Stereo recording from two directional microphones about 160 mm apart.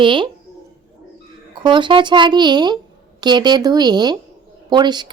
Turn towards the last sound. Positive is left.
turn(degrees=-25)  # may be behind; listen again after turning